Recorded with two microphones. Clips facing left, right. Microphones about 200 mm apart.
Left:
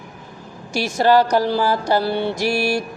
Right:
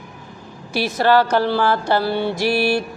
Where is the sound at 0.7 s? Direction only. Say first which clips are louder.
Right 1 dB; 45° left (ahead or behind).